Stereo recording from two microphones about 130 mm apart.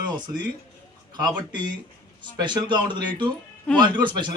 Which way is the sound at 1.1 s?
35° right (ahead or behind).